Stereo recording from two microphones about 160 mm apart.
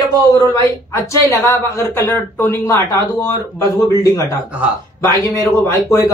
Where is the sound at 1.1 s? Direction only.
20° left (ahead or behind).